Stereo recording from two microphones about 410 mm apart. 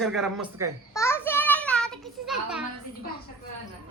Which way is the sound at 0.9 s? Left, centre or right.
Centre.